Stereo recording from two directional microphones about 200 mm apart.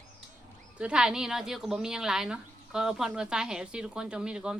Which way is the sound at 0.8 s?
5° right (ahead or behind).